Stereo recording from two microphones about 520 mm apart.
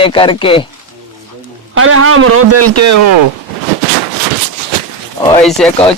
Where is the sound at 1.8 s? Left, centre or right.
Right.